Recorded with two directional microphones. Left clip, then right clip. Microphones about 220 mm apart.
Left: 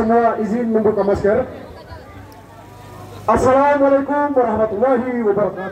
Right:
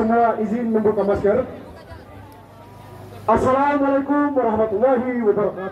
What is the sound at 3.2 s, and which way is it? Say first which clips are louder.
A man's voice: left 4 dB; 50° left (ahead or behind).